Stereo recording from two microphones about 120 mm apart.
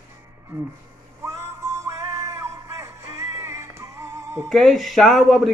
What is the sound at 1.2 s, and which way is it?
Music, 25° right (ahead or behind).